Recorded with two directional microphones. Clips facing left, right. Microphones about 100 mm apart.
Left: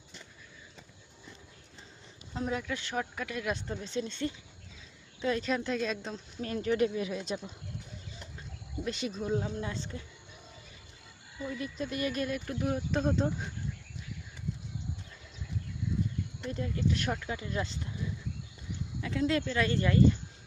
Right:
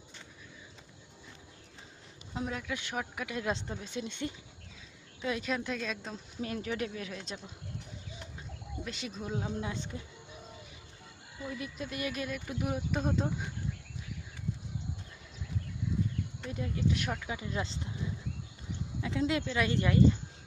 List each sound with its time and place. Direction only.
2.5 s a woman's voice: centre (ahead or behind)
2.7 s speech: 10° right (ahead or behind)
3.3 s speech: 25° right (ahead or behind)
3.8 s a woman's voice: 10° right (ahead or behind); by 7.5 s 5° left (ahead or behind)
8.8 s a woman's voice: centre (ahead or behind)
9.4 s speech: 15° right (ahead or behind)
11.4 s a woman's voice: 5° right (ahead or behind)
16.5 s speech: 10° right (ahead or behind)
17.7 s speech: 25° right (ahead or behind)